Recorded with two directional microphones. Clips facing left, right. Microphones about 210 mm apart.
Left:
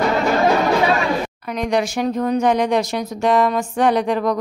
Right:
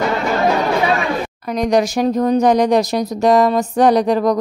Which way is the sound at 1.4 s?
40° right (ahead or behind).